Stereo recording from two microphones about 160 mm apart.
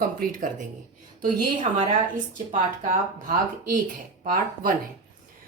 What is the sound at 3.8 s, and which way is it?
Speech, 55° right (ahead or behind).